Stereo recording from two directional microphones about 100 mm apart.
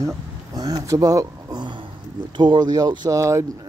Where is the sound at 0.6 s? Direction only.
35° right (ahead or behind).